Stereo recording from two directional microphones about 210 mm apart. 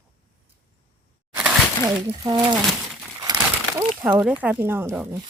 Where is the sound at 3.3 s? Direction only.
20° right (ahead or behind).